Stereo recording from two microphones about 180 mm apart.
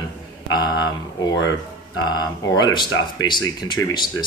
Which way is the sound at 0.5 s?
25° left (ahead or behind).